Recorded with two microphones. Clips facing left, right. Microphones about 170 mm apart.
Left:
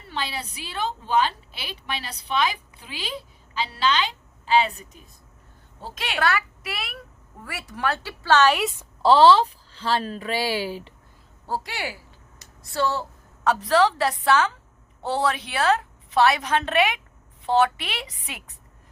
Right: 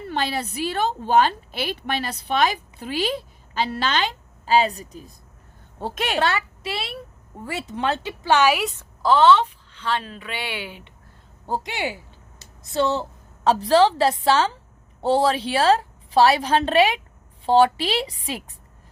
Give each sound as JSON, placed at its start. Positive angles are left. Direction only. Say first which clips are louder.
{"t": 0.1, "sound": "a woman's voice", "louder": "right 5 dB", "side_deg": -50}
{"t": 5.8, "sound": "a woman's voice", "louder": "right 7 dB", "side_deg": -50}
{"t": 6.1, "sound": "a woman's voice", "louder": "left 2 dB", "side_deg": -30}
{"t": 9.0, "sound": "a woman's voice", "louder": "left 1 dB", "side_deg": 30}
{"t": 11.4, "sound": "a woman's voice", "louder": "right 3 dB", "side_deg": -20}